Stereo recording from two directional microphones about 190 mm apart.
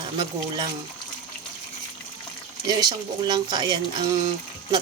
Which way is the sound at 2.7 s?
20° right (ahead or behind).